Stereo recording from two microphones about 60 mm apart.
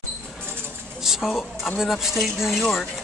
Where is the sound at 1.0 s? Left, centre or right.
Centre.